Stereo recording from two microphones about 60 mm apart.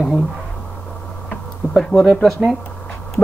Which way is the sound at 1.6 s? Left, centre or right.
Right.